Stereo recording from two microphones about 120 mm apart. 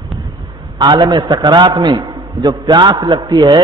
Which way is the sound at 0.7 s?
40° right (ahead or behind).